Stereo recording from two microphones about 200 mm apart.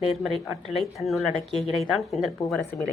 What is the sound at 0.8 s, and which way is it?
Speech, centre (ahead or behind).